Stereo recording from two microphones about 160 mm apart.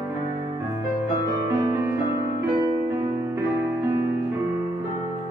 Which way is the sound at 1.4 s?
15° right (ahead or behind).